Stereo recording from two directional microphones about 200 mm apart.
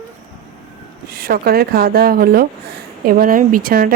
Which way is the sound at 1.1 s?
50° right (ahead or behind).